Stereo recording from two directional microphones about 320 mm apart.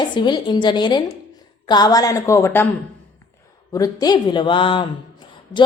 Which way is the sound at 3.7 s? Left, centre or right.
Centre.